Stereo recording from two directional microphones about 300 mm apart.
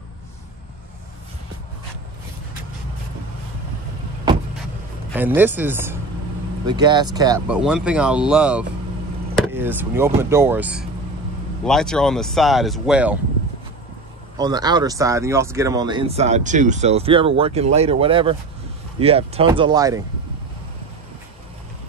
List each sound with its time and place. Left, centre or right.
5.1 s speech: centre
14.4 s speech: centre